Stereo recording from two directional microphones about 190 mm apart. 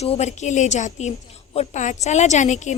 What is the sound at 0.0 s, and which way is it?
A woman's voice, 35° left (ahead or behind).